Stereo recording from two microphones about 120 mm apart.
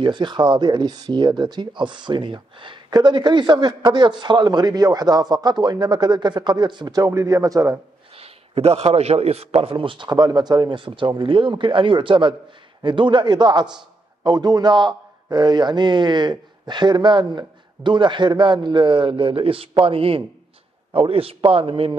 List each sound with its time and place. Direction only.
0.0 s speech: 40° right (ahead or behind)
8.2 s a man's voice: 55° right (ahead or behind)